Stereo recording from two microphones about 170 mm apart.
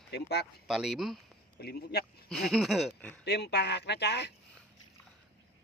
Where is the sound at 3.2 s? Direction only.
75° left (ahead or behind).